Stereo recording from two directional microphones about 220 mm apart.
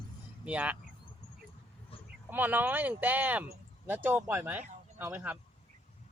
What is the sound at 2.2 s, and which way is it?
Speech, 10° right (ahead or behind).